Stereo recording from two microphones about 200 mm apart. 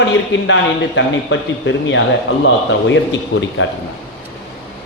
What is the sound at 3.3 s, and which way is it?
Speech, 70° left (ahead or behind).